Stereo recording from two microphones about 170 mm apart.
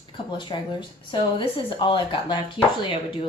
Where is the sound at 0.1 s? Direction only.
25° left (ahead or behind).